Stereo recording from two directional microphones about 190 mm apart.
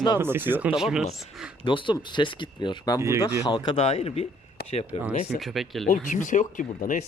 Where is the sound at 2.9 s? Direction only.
15° right (ahead or behind).